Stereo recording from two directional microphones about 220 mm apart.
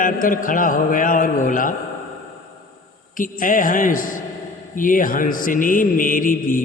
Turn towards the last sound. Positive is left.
turn(degrees=40)  # may be behind; listen again after turning